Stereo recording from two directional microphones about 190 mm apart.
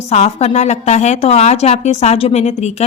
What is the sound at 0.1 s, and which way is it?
A woman's voice, 35° left (ahead or behind).